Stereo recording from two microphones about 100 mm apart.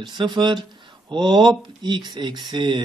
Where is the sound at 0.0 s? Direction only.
50° right (ahead or behind).